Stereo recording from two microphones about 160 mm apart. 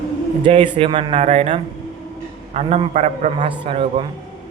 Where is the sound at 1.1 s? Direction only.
40° right (ahead or behind).